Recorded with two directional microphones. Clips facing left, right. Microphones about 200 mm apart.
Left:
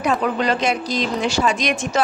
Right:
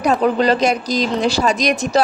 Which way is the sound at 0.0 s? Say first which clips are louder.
Right 5 dB; 35° right (ahead or behind).